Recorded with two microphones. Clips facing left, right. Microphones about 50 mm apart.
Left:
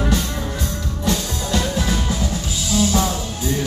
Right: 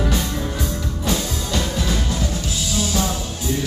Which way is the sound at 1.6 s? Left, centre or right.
Centre.